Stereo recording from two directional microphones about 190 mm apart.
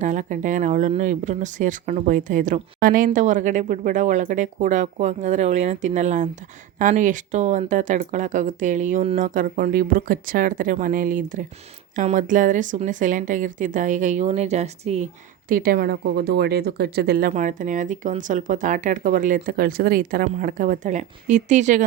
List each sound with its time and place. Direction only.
0.0 s a woman's voice: 40° right (ahead or behind)